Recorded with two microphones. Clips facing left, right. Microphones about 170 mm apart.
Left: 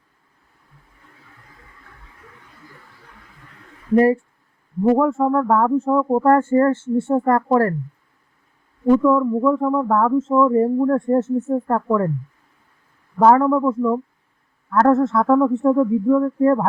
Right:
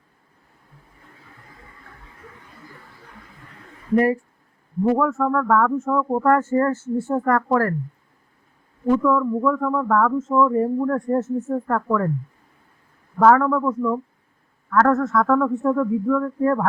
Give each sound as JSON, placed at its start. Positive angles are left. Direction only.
{"t": 3.9, "sound": "speech", "side_deg": 30}
{"t": 9.0, "sound": "speech", "side_deg": 25}
{"t": 13.1, "sound": "speech", "side_deg": 25}